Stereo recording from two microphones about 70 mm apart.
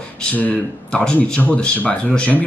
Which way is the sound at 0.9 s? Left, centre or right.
Centre.